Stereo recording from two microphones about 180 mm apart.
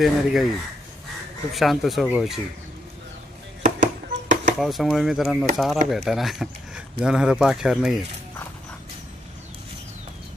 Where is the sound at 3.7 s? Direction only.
40° right (ahead or behind).